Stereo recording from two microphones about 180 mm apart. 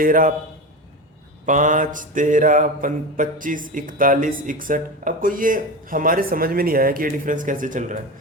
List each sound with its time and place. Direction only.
0.0 s mantra: 50° right (ahead or behind)
1.5 s mantra: 45° right (ahead or behind)